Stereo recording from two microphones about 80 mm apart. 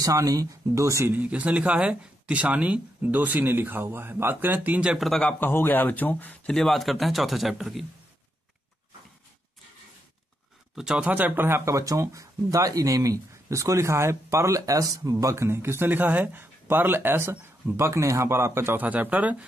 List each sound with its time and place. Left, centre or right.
0.0 s speech: right
1.1 s speech: centre
4.9 s speech: centre
5.4 s speech: left
6.5 s speech: centre
10.8 s speech: centre
11.1 s speech: right
18.8 s speech: centre